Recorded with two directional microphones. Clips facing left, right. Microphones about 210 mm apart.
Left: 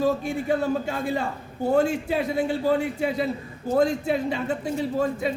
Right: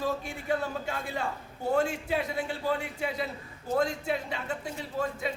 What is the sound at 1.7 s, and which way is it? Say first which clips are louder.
A man's voice: left 6 dB; 35° left (ahead or behind).